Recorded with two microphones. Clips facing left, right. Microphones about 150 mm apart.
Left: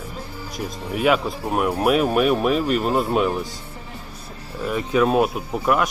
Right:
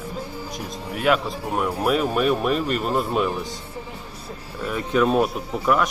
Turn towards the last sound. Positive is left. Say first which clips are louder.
# even
turn(degrees=5)  # may be behind; listen again after turning